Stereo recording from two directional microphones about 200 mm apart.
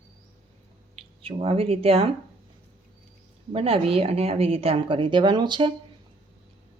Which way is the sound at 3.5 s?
30° right (ahead or behind).